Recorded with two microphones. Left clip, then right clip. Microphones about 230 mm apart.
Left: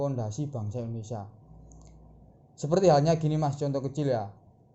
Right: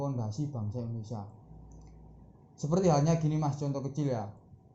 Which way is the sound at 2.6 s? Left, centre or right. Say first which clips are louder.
Left 6 dB; left.